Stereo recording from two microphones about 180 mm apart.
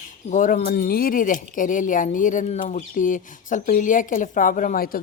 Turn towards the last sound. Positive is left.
turn(degrees=50)  # may be behind; listen again after turning